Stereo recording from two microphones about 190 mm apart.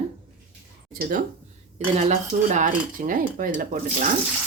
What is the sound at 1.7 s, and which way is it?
Speech, 35° right (ahead or behind).